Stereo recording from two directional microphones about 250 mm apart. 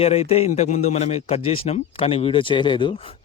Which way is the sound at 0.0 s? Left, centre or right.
Left.